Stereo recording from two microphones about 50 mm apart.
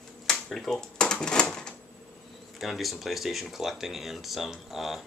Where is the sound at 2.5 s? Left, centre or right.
Centre.